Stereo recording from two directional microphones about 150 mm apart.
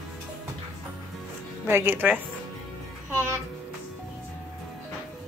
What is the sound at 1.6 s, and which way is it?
Speech, 15° right (ahead or behind).